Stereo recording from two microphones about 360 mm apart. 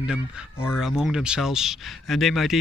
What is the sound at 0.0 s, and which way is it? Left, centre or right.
Speech, centre.